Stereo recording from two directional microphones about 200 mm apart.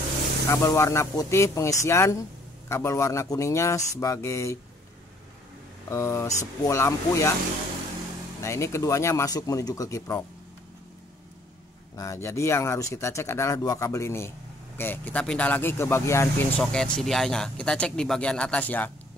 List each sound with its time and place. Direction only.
0.5 s speech: 15° left (ahead or behind)
5.9 s speech: 15° left (ahead or behind)
8.4 s speech: 15° left (ahead or behind)
12.0 s speech: 15° left (ahead or behind)